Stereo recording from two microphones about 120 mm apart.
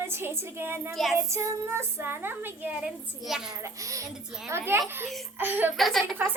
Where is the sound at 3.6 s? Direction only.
25° right (ahead or behind).